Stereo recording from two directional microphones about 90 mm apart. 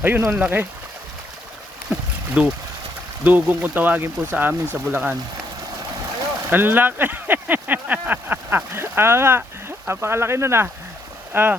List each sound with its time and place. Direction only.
0.3 s speech: 20° right (ahead or behind)
1.9 s a sound: 10° right (ahead or behind)
3.2 s speech: 20° right (ahead or behind)
6.5 s speech: 20° right (ahead or behind)